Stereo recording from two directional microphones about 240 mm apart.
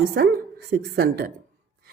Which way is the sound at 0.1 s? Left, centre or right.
Right.